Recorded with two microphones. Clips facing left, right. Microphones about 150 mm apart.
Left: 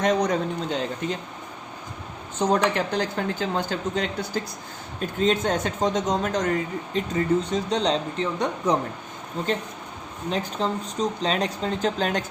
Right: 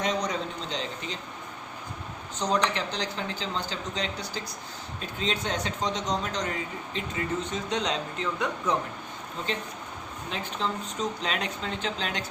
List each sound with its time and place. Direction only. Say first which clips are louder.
0.0 s speech: left 7 dB; 50° left (ahead or behind)
2.4 s speech: left 5 dB; 50° left (ahead or behind)
6.9 s speech: left 9 dB; 35° left (ahead or behind)
10.2 s speech: left 6 dB; 40° left (ahead or behind)